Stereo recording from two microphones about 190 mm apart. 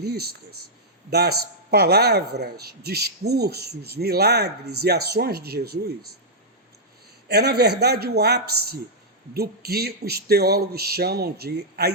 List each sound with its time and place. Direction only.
0.0 s a man's voice: 55° right (ahead or behind)
7.3 s a man's voice: 60° right (ahead or behind)